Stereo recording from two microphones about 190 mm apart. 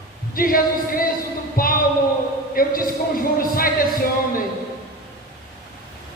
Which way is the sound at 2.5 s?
50° left (ahead or behind).